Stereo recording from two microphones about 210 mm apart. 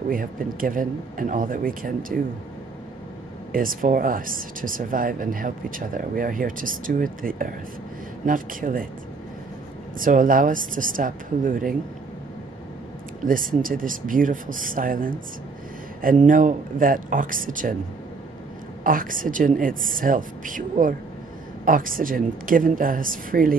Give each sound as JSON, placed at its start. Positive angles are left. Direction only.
{"t": 0.1, "sound": "speech", "side_deg": -40}
{"t": 3.5, "sound": "speech", "side_deg": -40}
{"t": 9.9, "sound": "speech", "side_deg": -40}
{"t": 13.2, "sound": "speech", "side_deg": -40}
{"t": 18.9, "sound": "speech", "side_deg": -40}